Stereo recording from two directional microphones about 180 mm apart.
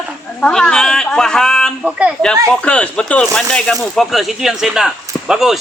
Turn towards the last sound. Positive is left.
turn(degrees=-5)  # may be behind; listen again after turning